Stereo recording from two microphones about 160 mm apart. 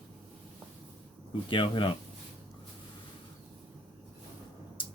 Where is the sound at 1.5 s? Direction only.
30° left (ahead or behind).